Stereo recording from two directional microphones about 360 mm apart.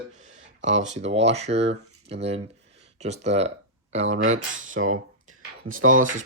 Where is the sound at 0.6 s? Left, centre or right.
Centre.